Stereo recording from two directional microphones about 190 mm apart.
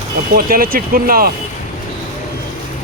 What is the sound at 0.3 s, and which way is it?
Speech, 50° right (ahead or behind).